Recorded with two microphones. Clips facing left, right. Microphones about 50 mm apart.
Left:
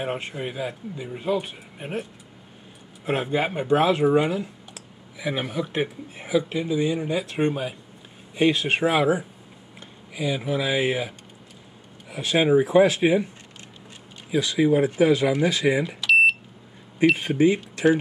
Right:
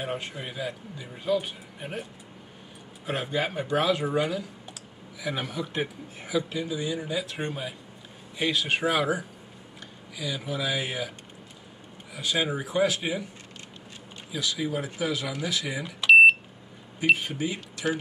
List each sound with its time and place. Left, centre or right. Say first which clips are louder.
0.4 s speech: left 4 dB; left
1.4 s speech: left 1 dB; left
3.1 s speech: left 5 dB; left
7.0 s speech: left 7 dB; left
8.8 s speech: left 8 dB; left
12.1 s speech: left 8 dB; left
14.3 s speech: left 10 dB; left
16.0 s smoke detector: right 5 dB; right
17.2 s speech: left 11 dB; left